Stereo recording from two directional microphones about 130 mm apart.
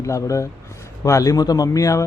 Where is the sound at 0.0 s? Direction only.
25° left (ahead or behind).